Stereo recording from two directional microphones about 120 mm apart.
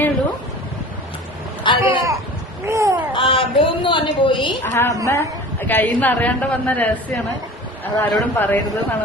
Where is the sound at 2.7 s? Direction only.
25° right (ahead or behind).